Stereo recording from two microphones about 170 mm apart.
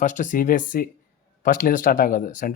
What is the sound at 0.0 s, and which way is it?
Speech, 45° left (ahead or behind).